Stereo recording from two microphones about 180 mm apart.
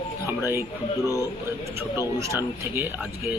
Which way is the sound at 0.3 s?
15° right (ahead or behind).